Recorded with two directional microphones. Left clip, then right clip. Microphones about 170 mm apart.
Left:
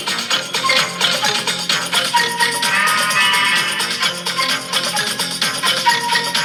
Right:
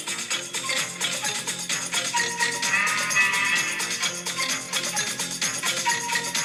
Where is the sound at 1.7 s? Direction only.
25° left (ahead or behind).